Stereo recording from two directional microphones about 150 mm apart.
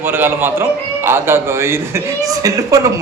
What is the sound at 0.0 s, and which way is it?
A man's voice, 15° right (ahead or behind).